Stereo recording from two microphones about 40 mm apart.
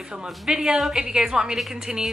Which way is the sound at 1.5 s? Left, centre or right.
Centre.